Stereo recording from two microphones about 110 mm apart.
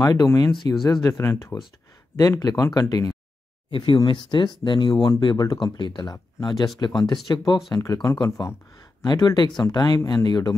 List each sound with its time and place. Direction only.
0.0 s speech: 30° left (ahead or behind)
3.7 s speech: 45° left (ahead or behind)